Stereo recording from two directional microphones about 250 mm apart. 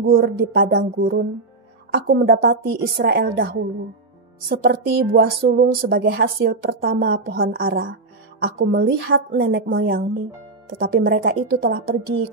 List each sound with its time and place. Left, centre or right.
0.0 s a woman's voice: right